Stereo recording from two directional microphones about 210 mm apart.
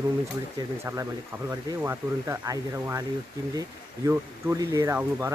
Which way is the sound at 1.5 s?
10° right (ahead or behind).